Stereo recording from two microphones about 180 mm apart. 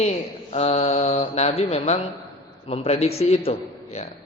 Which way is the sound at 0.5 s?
35° left (ahead or behind).